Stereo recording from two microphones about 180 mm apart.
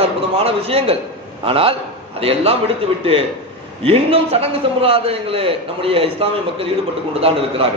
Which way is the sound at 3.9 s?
35° right (ahead or behind).